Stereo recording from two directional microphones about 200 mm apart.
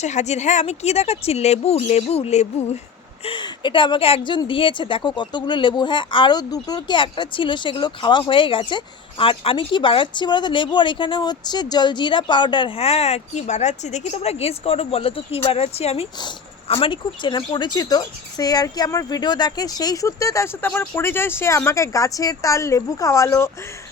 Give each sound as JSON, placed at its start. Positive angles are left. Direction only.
{"t": 0.0, "sound": "a woman's voice", "side_deg": 35}